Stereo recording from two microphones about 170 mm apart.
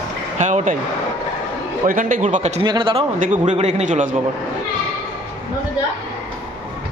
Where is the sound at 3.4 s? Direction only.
45° right (ahead or behind).